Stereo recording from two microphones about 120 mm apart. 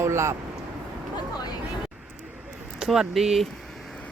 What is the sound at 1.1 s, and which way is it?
Speech, 35° left (ahead or behind).